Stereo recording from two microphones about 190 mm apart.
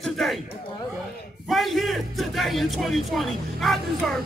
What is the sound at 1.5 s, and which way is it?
A man's voice, centre (ahead or behind).